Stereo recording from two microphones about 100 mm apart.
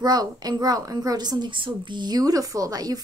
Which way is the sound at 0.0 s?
40° right (ahead or behind).